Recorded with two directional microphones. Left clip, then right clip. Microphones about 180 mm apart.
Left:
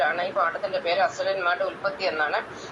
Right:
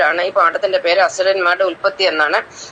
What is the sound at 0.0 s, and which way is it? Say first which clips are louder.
Speech: right 10 dB; 45° right (ahead or behind).